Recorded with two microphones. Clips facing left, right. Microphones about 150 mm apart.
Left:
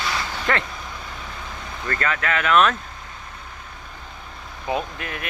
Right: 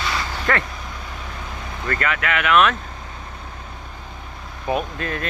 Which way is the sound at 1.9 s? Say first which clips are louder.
Right 1 dB; 35° left (ahead or behind).